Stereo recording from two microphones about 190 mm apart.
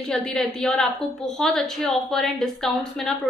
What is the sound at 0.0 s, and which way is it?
A woman's voice, 5° left (ahead or behind).